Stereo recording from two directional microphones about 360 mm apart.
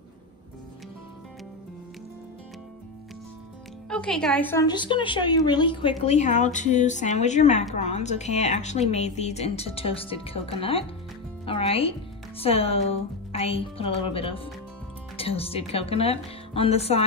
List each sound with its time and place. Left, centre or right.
3.9 s a woman's voice: centre
11.4 s music: centre
12.4 s a woman's voice: centre